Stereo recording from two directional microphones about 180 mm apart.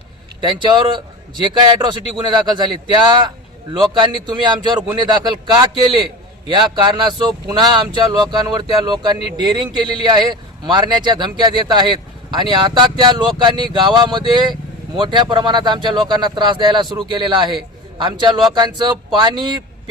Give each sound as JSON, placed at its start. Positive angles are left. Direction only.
{"t": 0.4, "sound": "speech", "side_deg": -25}